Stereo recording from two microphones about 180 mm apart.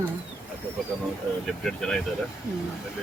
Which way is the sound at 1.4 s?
Centre (ahead or behind).